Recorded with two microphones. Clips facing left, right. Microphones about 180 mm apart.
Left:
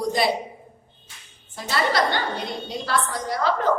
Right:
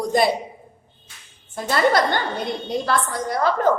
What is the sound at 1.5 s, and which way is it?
A woman's voice, 50° right (ahead or behind).